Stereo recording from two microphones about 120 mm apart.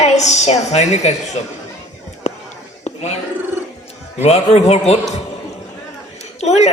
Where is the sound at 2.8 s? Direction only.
65° left (ahead or behind).